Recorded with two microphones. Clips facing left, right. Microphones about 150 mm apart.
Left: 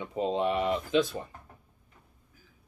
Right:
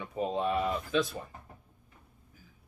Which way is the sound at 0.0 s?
20° left (ahead or behind).